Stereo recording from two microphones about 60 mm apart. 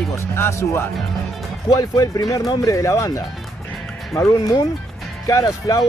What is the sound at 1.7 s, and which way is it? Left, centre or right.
Speech, left.